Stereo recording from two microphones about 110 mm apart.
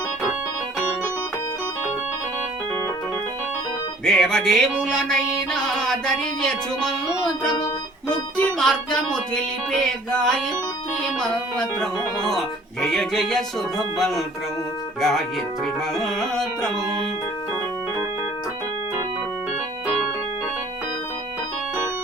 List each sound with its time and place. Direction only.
4.0 s music: 5° left (ahead or behind)
7.4 s music: 40° left (ahead or behind)
8.4 s music: 5° left (ahead or behind)
15.6 s music: 5° left (ahead or behind)